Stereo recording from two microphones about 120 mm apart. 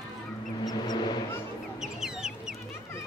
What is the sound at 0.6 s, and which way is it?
Vehicle, 35° left (ahead or behind).